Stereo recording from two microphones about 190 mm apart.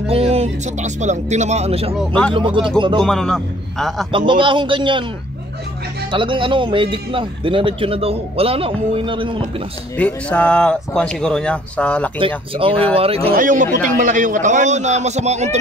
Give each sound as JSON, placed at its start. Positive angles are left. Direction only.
{"t": 0.1, "sound": "a man's voice", "side_deg": -30}
{"t": 2.0, "sound": "speech", "side_deg": 5}
{"t": 2.3, "sound": "a man's voice", "side_deg": -25}
{"t": 3.0, "sound": "speech", "side_deg": 5}
{"t": 4.3, "sound": "a man's voice", "side_deg": -25}
{"t": 6.1, "sound": "a man's voice", "side_deg": -25}
{"t": 9.9, "sound": "speech", "side_deg": 5}
{"t": 12.5, "sound": "a man's voice", "side_deg": -30}
{"t": 13.3, "sound": "a man's voice", "side_deg": -45}